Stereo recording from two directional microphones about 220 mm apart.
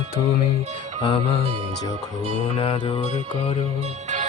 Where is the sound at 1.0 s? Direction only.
20° left (ahead or behind).